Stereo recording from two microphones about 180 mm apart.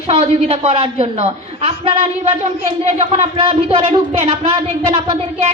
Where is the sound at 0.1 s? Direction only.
35° right (ahead or behind).